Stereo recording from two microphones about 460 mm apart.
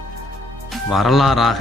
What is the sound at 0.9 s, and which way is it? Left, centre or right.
Speech, centre.